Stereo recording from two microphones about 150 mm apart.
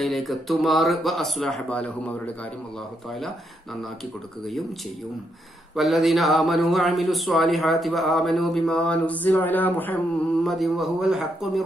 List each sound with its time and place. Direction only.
0.0 s a man's voice: centre (ahead or behind)
3.8 s a man's voice: centre (ahead or behind)
5.8 s a man's voice: centre (ahead or behind)
10.4 s a man's voice: centre (ahead or behind)